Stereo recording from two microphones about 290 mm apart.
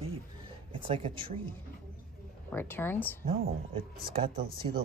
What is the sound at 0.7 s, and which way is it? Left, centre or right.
Speech, centre.